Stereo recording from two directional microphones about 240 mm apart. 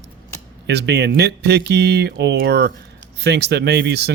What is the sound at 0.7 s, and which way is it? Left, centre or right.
Speech, right.